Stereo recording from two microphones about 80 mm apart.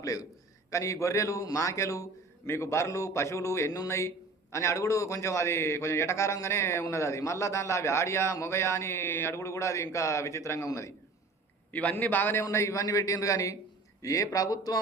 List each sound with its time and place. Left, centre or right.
0.0 s a man's voice: left
11.7 s a man's voice: centre; by 14.8 s left